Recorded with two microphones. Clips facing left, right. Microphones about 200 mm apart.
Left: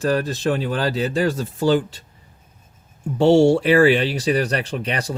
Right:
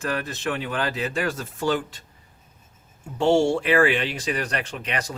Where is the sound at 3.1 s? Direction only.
35° left (ahead or behind).